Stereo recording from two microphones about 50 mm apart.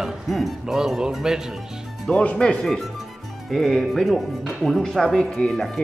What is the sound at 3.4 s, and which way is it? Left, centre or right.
Speech, centre.